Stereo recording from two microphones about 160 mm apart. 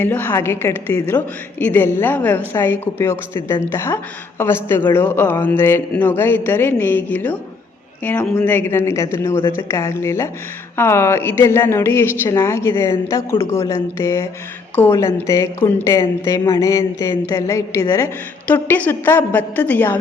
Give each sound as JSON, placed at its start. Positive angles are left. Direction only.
{"t": 0.0, "sound": "a woman's voice", "side_deg": 10}